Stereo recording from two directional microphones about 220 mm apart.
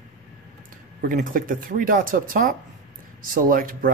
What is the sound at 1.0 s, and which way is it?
Speech, 40° right (ahead or behind).